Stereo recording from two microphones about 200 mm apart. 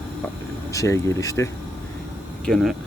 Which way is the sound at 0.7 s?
15° left (ahead or behind).